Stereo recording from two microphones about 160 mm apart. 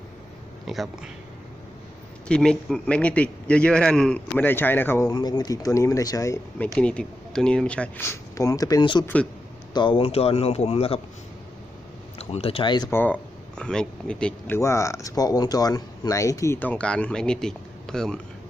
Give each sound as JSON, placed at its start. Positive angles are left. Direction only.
{"t": 0.7, "sound": "speech", "side_deg": 0}
{"t": 2.2, "sound": "speech", "side_deg": 5}
{"t": 6.7, "sound": "speech", "side_deg": 5}
{"t": 12.2, "sound": "speech", "side_deg": 40}
{"t": 12.9, "sound": "speech", "side_deg": 10}